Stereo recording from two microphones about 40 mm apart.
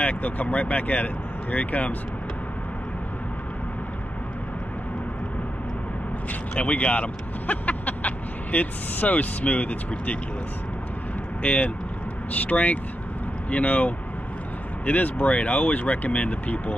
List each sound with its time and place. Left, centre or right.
0.0 s speech: left
6.5 s speech: left
11.4 s speech: left